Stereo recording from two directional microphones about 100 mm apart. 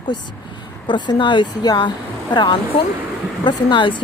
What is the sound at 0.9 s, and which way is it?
Speech, 50° left (ahead or behind).